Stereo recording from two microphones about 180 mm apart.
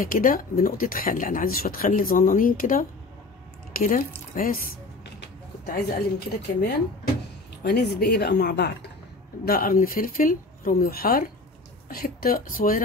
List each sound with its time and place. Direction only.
0.0 s a woman's voice: 50° left (ahead or behind); by 8.7 s 65° left (ahead or behind)
9.4 s speech: 55° left (ahead or behind)